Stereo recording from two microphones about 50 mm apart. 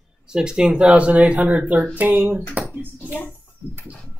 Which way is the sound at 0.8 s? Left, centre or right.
Right.